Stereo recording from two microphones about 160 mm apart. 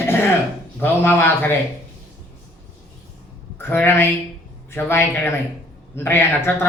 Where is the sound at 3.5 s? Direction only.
15° left (ahead or behind).